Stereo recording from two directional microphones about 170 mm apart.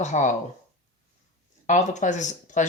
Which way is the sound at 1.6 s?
45° left (ahead or behind).